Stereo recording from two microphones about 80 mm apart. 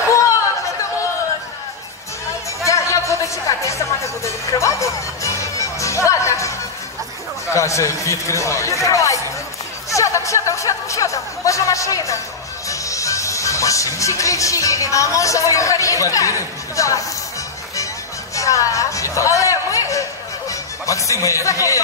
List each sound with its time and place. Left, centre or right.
2.6 s music: left
7.4 s a man's voice: left
18.3 s a sound: left